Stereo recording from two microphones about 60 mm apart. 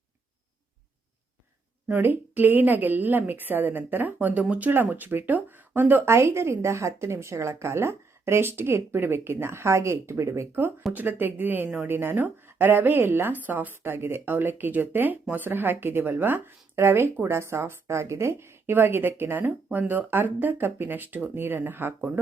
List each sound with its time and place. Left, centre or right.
1.9 s speech: right
4.7 s speech: right
6.1 s a woman's voice: right
10.9 s speech: right
16.7 s a woman's voice: right